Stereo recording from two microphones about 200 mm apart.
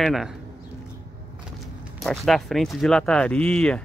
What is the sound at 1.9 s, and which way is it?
Speech, centre (ahead or behind).